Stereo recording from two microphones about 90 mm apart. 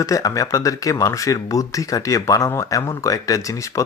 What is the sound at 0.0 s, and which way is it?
Speech, 40° left (ahead or behind).